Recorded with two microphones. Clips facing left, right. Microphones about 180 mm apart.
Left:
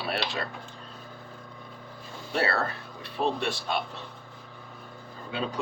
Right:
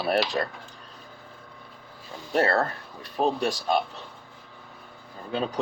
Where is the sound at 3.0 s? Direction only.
40° right (ahead or behind).